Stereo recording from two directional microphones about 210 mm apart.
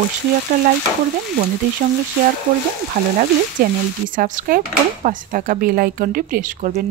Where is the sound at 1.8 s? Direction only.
35° right (ahead or behind).